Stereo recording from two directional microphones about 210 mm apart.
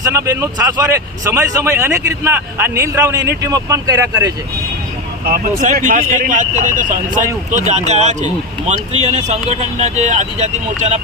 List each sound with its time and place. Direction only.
0.0 s speech: 15° right (ahead or behind)
5.3 s speech: 40° right (ahead or behind)